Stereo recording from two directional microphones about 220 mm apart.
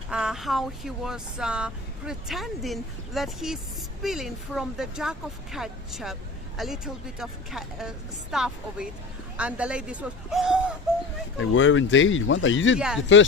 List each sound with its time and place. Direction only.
0.1 s speech: 5° right (ahead or behind)
11.3 s speech: 60° left (ahead or behind)